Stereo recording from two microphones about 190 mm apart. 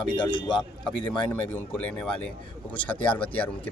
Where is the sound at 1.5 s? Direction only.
5° left (ahead or behind).